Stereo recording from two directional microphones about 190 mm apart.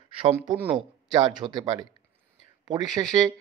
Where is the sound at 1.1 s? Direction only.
25° right (ahead or behind).